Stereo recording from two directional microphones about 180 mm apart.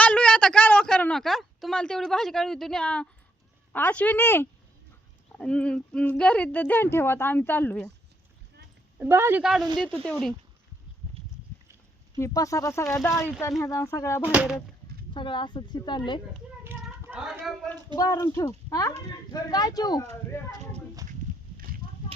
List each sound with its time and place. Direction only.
0.0 s a sound: 5° left (ahead or behind)
3.7 s a woman's voice: 10° left (ahead or behind)
9.0 s speech: 15° right (ahead or behind); by 10.3 s 5° left (ahead or behind)
12.1 s a woman's voice: 20° left (ahead or behind)
14.3 s speech: 5° right (ahead or behind)
15.1 s a woman's voice: 25° left (ahead or behind)
17.1 s speech: 5° right (ahead or behind)
17.9 s a woman's voice: 20° left (ahead or behind)